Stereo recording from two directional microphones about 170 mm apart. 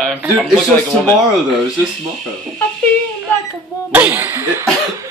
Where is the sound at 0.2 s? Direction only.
5° right (ahead or behind).